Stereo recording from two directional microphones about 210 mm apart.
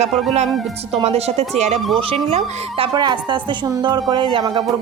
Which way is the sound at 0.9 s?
30° right (ahead or behind).